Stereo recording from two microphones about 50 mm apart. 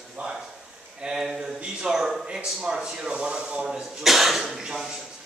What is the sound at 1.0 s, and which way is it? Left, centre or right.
Speech, centre.